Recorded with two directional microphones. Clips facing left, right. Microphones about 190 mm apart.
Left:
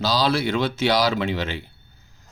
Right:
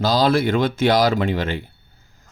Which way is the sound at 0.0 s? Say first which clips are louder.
Right 4 dB; 50° right (ahead or behind).